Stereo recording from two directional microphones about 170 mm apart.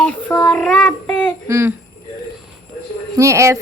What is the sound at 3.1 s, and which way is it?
Speech, 15° right (ahead or behind).